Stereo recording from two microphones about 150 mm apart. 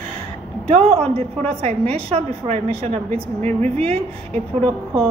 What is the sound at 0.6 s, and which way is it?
A woman's voice, 45° right (ahead or behind).